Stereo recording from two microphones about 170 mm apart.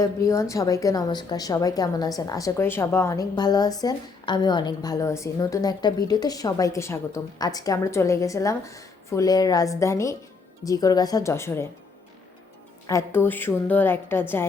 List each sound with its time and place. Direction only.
0.0 s a woman's voice: 20° left (ahead or behind)
12.9 s a woman's voice: 15° left (ahead or behind)